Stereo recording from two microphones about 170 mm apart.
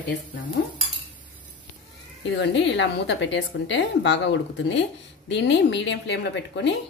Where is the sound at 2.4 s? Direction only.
90° left.